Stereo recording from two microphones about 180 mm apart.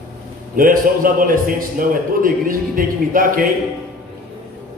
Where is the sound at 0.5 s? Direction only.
50° right (ahead or behind).